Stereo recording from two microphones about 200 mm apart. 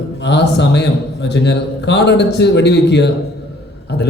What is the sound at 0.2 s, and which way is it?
A man's voice, 60° left (ahead or behind).